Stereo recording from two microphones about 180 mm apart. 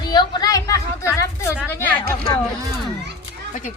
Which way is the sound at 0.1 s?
20° left (ahead or behind).